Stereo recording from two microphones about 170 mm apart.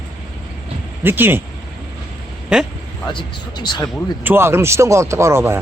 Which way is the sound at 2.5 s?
5° right (ahead or behind).